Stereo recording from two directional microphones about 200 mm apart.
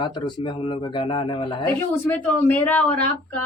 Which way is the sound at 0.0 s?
20° left (ahead or behind).